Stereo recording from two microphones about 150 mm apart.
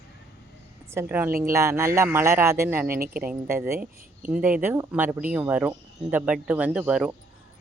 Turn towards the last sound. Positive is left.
turn(degrees=-5)  # may be behind; listen again after turning